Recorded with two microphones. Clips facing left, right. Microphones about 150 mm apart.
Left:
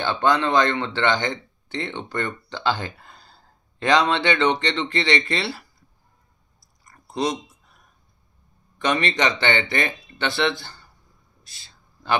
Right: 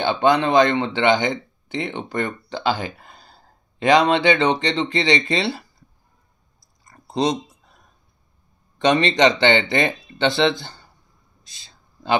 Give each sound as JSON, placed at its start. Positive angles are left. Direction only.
{"t": 0.0, "sound": "speech", "side_deg": -20}
{"t": 6.8, "sound": "a sound", "side_deg": -25}
{"t": 8.7, "sound": "speech", "side_deg": -20}
{"t": 11.4, "sound": "whispering", "side_deg": -20}